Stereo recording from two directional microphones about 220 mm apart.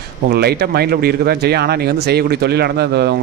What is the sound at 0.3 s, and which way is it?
Speech, 45° right (ahead or behind).